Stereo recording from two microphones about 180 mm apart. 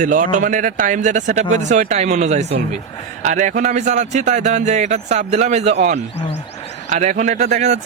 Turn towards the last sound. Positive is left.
turn(degrees=-40)  # may be behind; listen again after turning